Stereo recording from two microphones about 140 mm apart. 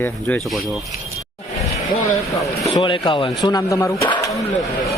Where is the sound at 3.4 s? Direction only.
25° left (ahead or behind).